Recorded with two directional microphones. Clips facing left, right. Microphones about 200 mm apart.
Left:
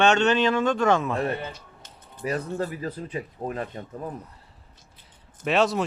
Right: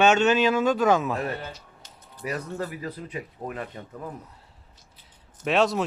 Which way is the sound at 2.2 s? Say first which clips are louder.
Left 3 dB; 30° left (ahead or behind).